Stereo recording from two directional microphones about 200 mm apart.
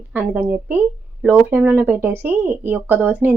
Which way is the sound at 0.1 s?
10° right (ahead or behind).